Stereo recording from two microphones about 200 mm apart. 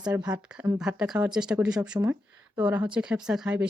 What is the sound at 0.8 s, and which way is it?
Speech, 5° right (ahead or behind).